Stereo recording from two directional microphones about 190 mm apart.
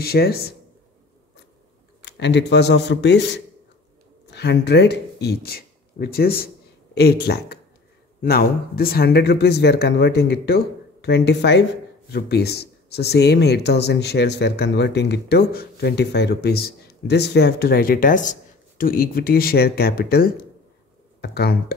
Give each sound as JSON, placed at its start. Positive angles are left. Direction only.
{"t": 0.0, "sound": "speech", "side_deg": 55}
{"t": 2.0, "sound": "speech", "side_deg": 65}